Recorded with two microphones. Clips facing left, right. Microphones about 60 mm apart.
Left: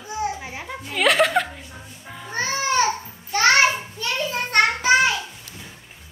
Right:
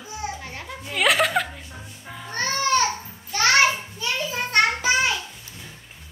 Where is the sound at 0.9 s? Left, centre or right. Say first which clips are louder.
Left 2 dB; centre.